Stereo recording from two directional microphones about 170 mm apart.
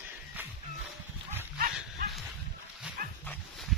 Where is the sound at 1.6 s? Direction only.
60° right (ahead or behind).